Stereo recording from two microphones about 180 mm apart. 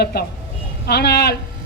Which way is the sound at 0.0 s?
60° left (ahead or behind).